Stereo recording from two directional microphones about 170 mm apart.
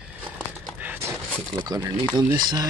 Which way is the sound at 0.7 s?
10° right (ahead or behind).